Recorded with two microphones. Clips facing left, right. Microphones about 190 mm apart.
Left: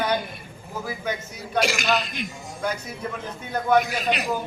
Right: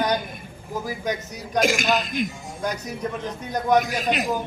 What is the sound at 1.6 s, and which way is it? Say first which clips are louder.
Speech: right 2 dB; 45° right (ahead or behind).